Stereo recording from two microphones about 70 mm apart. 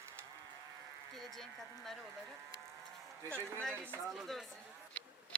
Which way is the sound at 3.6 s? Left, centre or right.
Centre.